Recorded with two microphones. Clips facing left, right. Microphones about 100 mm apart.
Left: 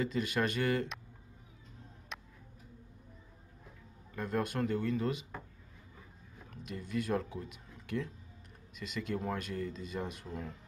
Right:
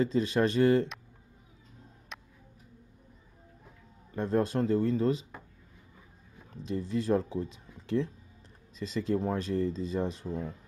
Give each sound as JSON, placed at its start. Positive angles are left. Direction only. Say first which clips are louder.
{"t": 0.0, "sound": "speech", "louder": "right 6 dB", "side_deg": -30}
{"t": 2.1, "sound": "tick-tock", "louder": "even", "side_deg": 0}
{"t": 4.1, "sound": "speech", "louder": "right 7 dB", "side_deg": -30}
{"t": 6.5, "sound": "speech", "louder": "right 6 dB", "side_deg": -30}